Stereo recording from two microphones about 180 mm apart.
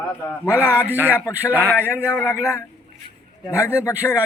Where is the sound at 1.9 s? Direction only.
15° left (ahead or behind).